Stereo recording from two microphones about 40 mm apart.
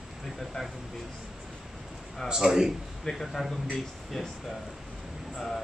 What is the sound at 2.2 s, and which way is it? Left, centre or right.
Speech, centre.